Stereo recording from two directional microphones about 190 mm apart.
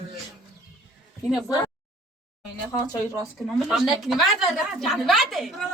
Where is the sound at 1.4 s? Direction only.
15° left (ahead or behind).